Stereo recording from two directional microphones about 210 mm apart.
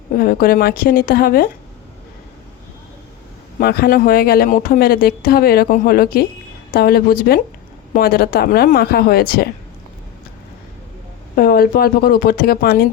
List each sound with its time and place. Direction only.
0.2 s speech: 45° left (ahead or behind)
3.6 s speech: 45° left (ahead or behind)
11.3 s speech: 45° left (ahead or behind)